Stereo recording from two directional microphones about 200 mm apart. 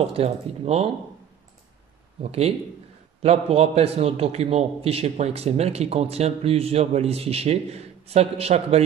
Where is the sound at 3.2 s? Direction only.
30° right (ahead or behind).